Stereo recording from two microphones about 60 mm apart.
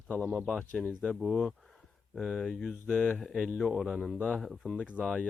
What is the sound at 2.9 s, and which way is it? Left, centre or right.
Speech, left.